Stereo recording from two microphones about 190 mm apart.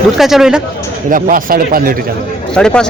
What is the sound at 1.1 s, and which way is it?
Speech, 45° right (ahead or behind).